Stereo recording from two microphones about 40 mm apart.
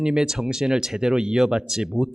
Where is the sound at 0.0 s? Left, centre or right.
Centre.